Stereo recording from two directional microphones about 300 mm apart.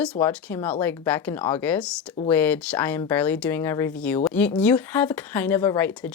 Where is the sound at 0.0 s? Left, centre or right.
Centre.